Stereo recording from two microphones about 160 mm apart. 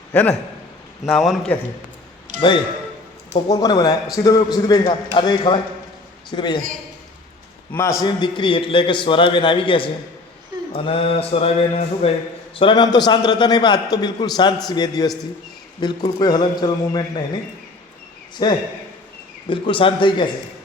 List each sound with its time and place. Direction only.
0.1 s a man's voice: 10° left (ahead or behind)
1.0 s a man's voice: centre (ahead or behind)
2.3 s a man's voice: 50° right (ahead or behind)
3.3 s a man's voice: 25° left (ahead or behind)
7.7 s a man's voice: 15° left (ahead or behind)
18.4 s a man's voice: 25° left (ahead or behind)